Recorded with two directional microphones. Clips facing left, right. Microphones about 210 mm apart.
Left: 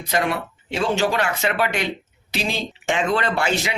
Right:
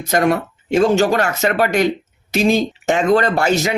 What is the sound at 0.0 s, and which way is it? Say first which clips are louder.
Speech: right 7 dB; 45° right (ahead or behind).